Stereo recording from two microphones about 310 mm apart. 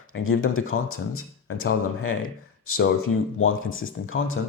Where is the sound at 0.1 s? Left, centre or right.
Left.